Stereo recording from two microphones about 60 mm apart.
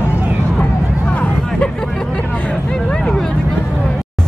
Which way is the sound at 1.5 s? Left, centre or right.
Centre.